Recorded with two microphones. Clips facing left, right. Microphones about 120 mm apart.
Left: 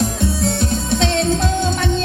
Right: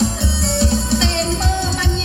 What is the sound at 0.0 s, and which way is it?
Music, 50° left (ahead or behind).